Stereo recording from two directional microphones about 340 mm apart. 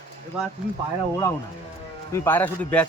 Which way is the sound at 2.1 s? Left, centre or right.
Centre.